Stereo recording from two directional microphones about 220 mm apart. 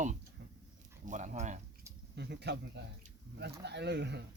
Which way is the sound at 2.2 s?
50° right (ahead or behind).